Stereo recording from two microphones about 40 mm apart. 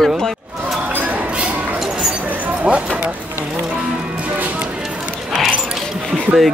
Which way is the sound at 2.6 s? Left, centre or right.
Right.